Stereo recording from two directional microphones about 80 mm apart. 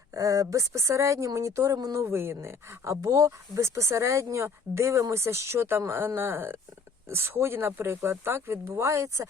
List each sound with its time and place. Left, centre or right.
0.1 s speech: right